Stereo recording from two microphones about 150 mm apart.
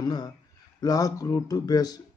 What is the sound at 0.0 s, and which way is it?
Speech, 30° left (ahead or behind).